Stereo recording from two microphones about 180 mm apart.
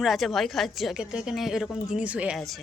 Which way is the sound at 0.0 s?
Centre (ahead or behind).